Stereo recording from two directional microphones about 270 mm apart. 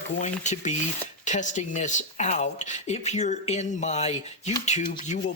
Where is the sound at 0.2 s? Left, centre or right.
Left.